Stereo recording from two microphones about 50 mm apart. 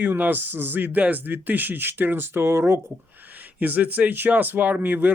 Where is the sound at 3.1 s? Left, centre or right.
Right.